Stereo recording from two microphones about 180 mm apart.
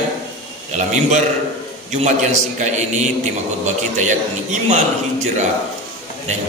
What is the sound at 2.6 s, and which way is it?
Speech, 40° right (ahead or behind).